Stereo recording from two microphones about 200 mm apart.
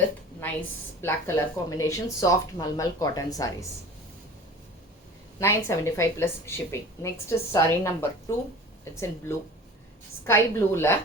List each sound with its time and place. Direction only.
0.4 s a woman's voice: 10° left (ahead or behind)
5.4 s speech: 15° left (ahead or behind)